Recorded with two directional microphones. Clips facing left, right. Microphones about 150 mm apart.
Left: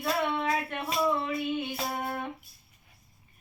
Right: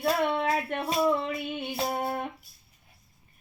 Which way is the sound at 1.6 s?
35° right (ahead or behind).